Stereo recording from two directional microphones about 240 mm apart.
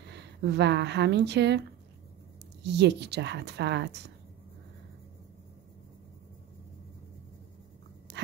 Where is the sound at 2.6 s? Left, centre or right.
Right.